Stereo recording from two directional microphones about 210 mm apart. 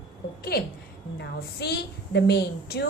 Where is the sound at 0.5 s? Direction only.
45° left (ahead or behind).